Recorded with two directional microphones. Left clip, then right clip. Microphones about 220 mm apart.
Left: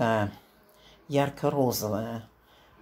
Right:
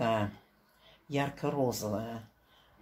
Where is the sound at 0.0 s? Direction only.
30° left (ahead or behind).